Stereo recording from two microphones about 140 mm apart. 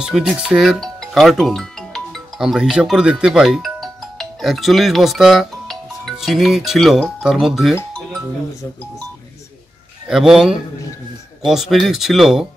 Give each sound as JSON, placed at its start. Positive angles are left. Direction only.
{"t": 0.0, "sound": "speech", "side_deg": -5}
{"t": 10.0, "sound": "speech", "side_deg": -5}